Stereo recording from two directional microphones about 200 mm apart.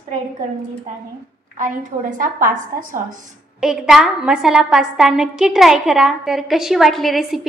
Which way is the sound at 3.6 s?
5° right (ahead or behind).